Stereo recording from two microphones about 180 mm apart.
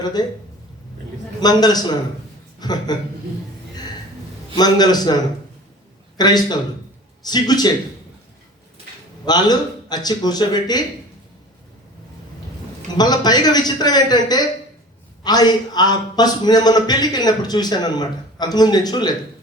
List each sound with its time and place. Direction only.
0.0 s a man's voice: 20° left (ahead or behind)
1.4 s a man's voice: 20° left (ahead or behind)
4.5 s a man's voice: 20° left (ahead or behind)
9.2 s a man's voice: 20° left (ahead or behind)
13.0 s a man's voice: 20° left (ahead or behind)